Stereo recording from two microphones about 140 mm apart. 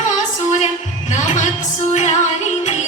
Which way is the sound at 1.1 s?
60° left (ahead or behind).